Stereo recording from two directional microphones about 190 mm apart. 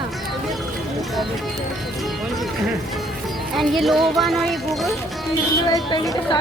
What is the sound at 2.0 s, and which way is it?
Speech, centre (ahead or behind).